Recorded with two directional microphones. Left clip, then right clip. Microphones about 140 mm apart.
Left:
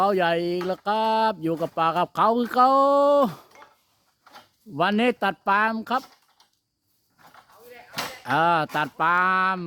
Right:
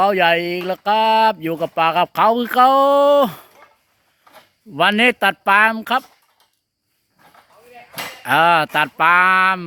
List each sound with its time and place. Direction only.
0.0 s speech: 5° right (ahead or behind)
4.7 s speech: 15° right (ahead or behind)
8.2 s speech: 20° right (ahead or behind)